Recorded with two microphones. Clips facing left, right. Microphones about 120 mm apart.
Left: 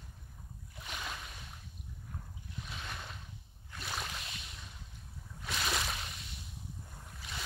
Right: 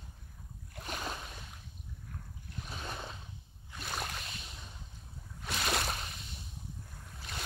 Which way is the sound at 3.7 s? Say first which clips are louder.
Right 1 dB; centre (ahead or behind).